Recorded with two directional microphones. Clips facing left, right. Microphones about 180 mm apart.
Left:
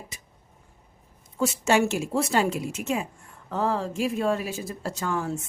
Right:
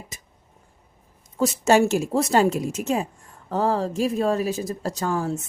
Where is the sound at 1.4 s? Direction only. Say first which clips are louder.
Right 4 dB; 40° right (ahead or behind).